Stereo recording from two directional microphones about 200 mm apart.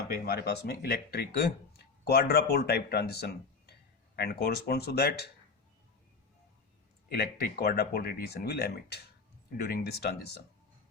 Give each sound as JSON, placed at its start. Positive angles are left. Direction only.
{"t": 0.3, "sound": "speech", "side_deg": 55}
{"t": 7.1, "sound": "speech", "side_deg": 55}